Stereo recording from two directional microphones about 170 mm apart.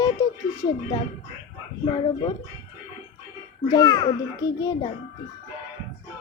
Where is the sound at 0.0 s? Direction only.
20° left (ahead or behind).